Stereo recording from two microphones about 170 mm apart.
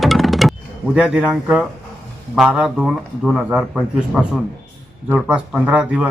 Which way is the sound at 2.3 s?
5° right (ahead or behind).